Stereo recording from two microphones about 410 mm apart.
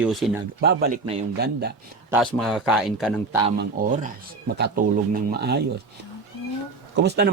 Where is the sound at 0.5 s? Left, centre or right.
Right.